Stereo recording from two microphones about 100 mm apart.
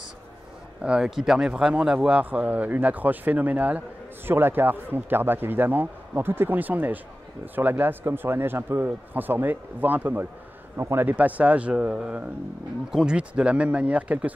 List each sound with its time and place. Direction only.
0.8 s speech: 5° right (ahead or behind)